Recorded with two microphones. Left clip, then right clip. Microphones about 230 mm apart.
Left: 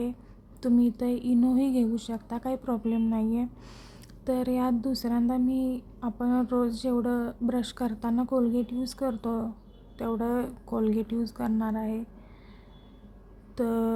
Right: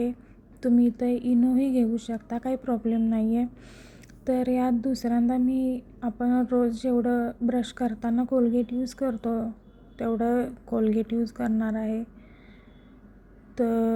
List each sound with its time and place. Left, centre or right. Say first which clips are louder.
0.6 s speech: right 2 dB; centre
13.6 s speech: right 3 dB; centre